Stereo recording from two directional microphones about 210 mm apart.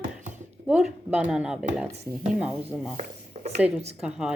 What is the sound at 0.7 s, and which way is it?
Speech, 5° right (ahead or behind).